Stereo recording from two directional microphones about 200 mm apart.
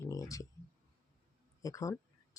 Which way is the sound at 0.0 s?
15° left (ahead or behind).